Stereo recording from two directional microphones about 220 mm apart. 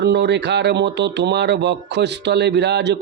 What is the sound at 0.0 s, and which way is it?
Speech, 50° right (ahead or behind).